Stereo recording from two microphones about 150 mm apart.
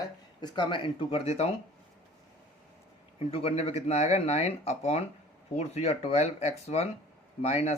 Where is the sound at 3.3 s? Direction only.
40° left (ahead or behind).